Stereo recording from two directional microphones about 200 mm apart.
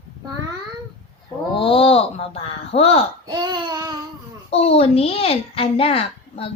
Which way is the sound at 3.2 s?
20° right (ahead or behind).